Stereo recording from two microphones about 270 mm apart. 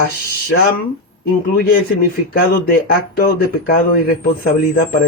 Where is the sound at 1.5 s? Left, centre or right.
Left.